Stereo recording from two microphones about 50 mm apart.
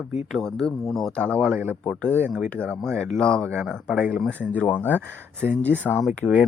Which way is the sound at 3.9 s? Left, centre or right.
Right.